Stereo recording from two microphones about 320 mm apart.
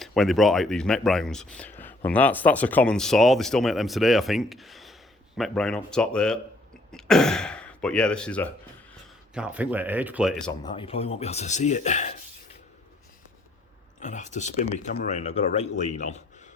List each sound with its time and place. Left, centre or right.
0.0 s speech: centre
10.6 s speech: centre
14.0 s speech: left